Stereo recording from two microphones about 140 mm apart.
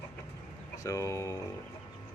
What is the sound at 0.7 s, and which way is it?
Speech, 25° left (ahead or behind).